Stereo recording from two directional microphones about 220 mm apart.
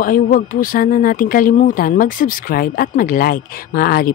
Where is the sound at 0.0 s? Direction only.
40° left (ahead or behind).